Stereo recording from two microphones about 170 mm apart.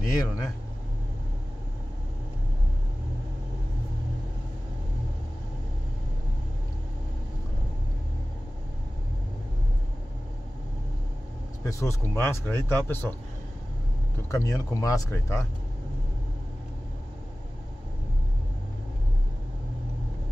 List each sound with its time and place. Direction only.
0.0 s speech: 20° left (ahead or behind)
11.6 s speech: 15° left (ahead or behind)
14.3 s speech: 20° left (ahead or behind)